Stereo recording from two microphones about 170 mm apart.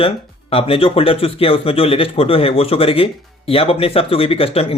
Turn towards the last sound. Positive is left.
turn(degrees=35)  # may be behind; listen again after turning